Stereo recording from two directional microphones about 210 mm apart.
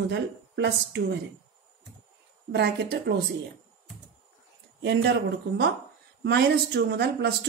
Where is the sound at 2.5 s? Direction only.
50° right (ahead or behind).